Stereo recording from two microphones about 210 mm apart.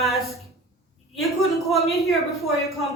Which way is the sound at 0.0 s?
Centre (ahead or behind).